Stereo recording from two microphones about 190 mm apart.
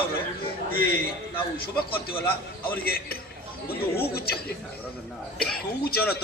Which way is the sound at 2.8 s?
55° left (ahead or behind).